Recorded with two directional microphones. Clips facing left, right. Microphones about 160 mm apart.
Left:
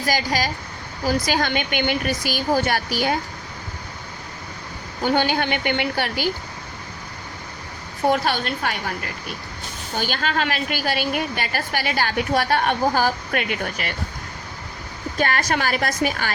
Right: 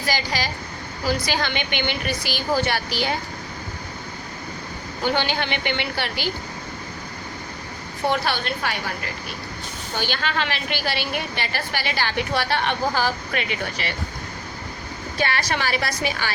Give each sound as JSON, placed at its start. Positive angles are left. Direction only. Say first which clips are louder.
{"t": 0.0, "sound": "a woman's voice", "louder": "left 3 dB", "side_deg": 45}
{"t": 5.0, "sound": "a woman's voice", "louder": "left 3 dB", "side_deg": 45}
{"t": 8.0, "sound": "a woman's voice", "louder": "left 3 dB", "side_deg": 45}
{"t": 9.9, "sound": "a woman's voice", "louder": "left 2 dB", "side_deg": 45}
{"t": 15.2, "sound": "a woman's voice", "louder": "left 2 dB", "side_deg": 45}